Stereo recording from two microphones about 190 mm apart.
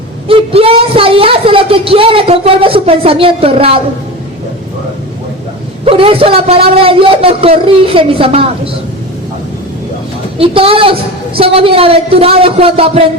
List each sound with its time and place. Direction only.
0.3 s a woman's voice: 30° right (ahead or behind)
5.8 s a woman's voice: 30° right (ahead or behind)
10.3 s a woman's voice: 30° right (ahead or behind)